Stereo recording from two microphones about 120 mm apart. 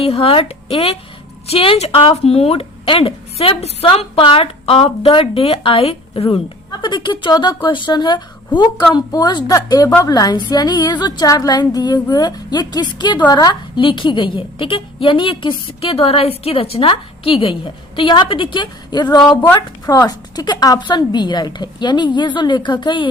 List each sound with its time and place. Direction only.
0.0 s speech: 55° left (ahead or behind)
3.8 s a woman's voice: 45° left (ahead or behind)